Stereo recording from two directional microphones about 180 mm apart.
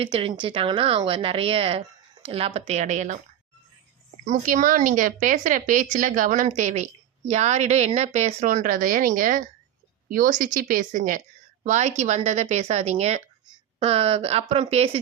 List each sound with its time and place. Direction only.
0.0 s a woman's voice: 30° right (ahead or behind)
4.2 s a woman's voice: 45° right (ahead or behind)